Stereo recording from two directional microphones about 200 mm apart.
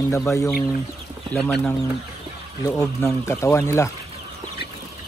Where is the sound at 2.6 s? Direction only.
15° left (ahead or behind).